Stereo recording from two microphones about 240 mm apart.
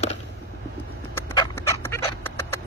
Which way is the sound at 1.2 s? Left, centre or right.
Centre.